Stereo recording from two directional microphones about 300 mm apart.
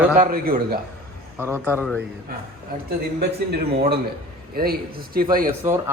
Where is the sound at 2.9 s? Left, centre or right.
Right.